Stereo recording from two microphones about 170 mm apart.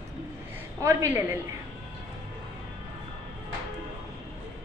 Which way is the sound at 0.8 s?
15° right (ahead or behind).